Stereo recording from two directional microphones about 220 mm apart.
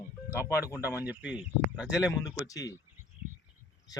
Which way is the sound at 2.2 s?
15° left (ahead or behind).